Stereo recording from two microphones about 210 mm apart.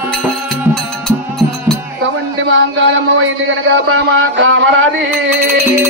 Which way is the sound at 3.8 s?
70° right (ahead or behind).